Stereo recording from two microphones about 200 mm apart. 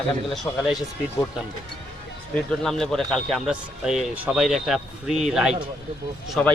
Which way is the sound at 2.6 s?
5° left (ahead or behind).